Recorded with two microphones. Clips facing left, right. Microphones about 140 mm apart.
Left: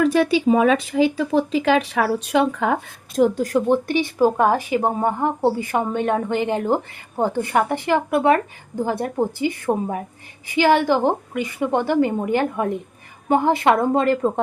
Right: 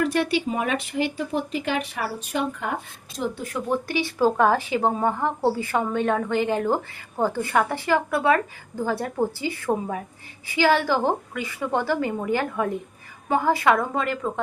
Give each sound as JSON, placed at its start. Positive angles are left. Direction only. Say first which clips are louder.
{"t": 0.5, "sound": "speech", "louder": "left 9 dB", "side_deg": 90}
{"t": 3.4, "sound": "speech", "louder": "left 8 dB", "side_deg": 35}
{"t": 3.8, "sound": "speech", "louder": "left 4 dB", "side_deg": 20}